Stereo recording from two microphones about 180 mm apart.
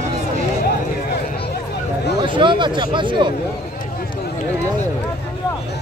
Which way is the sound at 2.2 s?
25° right (ahead or behind).